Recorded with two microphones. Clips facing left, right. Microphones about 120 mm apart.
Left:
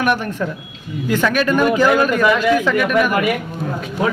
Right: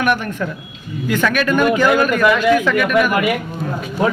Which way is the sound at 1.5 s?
Centre (ahead or behind).